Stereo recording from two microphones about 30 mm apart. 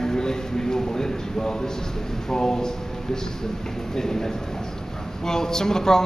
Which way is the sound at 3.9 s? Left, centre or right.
Centre.